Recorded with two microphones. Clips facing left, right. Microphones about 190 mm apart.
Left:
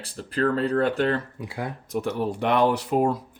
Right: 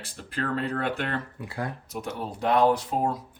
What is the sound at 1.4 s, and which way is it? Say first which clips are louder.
Speech: left 1 dB; 15° left (ahead or behind).